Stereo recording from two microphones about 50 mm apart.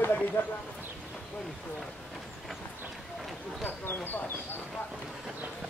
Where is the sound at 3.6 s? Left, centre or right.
Left.